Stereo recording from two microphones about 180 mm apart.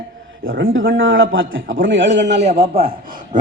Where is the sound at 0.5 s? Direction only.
90° right.